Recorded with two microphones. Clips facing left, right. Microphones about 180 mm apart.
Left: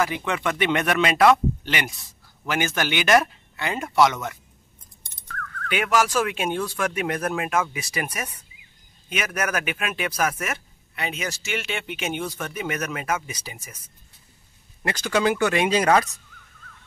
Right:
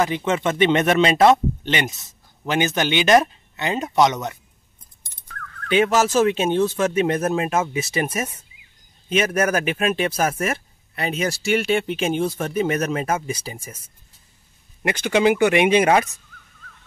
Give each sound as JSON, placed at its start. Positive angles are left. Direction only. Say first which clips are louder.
{"t": 0.0, "sound": "speech", "louder": "right 4 dB", "side_deg": -20}
{"t": 5.7, "sound": "speech", "louder": "right 5 dB", "side_deg": -25}
{"t": 15.0, "sound": "speech", "louder": "right 4 dB", "side_deg": -20}